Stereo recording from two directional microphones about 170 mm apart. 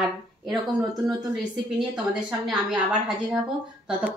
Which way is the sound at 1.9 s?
5° right (ahead or behind).